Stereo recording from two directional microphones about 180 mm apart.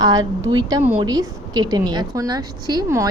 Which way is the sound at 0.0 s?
20° right (ahead or behind).